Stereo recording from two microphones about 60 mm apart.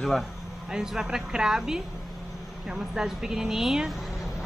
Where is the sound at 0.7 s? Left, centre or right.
Centre.